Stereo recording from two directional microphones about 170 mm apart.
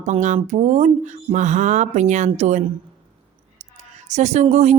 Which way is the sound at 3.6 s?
40° right (ahead or behind).